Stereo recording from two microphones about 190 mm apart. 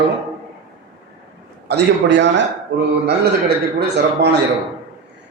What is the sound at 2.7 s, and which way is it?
A man's voice, 55° right (ahead or behind).